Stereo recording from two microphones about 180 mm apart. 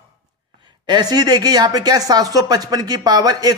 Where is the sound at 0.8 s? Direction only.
25° right (ahead or behind).